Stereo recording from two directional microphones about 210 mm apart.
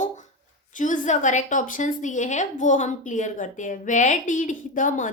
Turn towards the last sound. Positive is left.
turn(degrees=40)  # may be behind; listen again after turning